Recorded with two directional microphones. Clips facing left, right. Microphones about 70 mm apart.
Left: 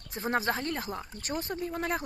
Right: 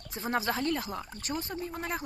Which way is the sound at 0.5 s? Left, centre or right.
Left.